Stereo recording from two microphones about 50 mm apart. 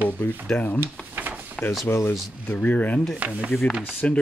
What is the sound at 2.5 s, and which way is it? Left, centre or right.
Speech, left.